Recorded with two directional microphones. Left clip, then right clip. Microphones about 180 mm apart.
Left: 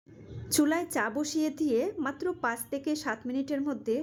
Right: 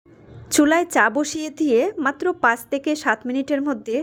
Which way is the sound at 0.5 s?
20° right (ahead or behind).